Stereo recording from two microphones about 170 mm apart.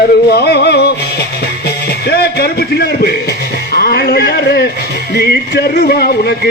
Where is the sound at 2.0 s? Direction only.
70° left (ahead or behind).